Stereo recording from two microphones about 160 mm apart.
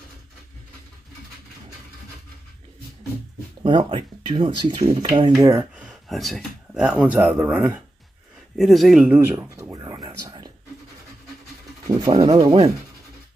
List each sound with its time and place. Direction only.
3.6 s speech: 30° right (ahead or behind)
5.4 s speech: 20° right (ahead or behind)
5.9 s speech: centre (ahead or behind)
9.3 s a sound: 20° right (ahead or behind)
11.9 s speech: 25° right (ahead or behind)